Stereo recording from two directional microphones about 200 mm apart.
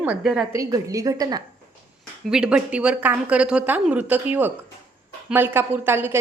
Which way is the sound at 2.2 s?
5° right (ahead or behind).